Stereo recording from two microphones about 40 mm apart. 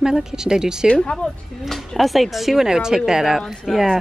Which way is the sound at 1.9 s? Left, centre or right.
Centre.